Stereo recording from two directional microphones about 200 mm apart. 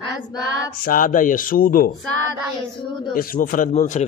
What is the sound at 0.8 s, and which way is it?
Speech, 45° left (ahead or behind).